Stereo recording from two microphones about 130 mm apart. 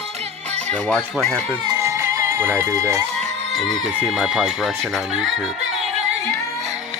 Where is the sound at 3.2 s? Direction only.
Centre (ahead or behind).